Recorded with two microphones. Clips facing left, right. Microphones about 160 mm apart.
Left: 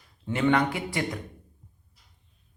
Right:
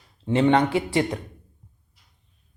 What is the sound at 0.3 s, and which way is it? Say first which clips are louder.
Speech: right 5 dB; 30° right (ahead or behind).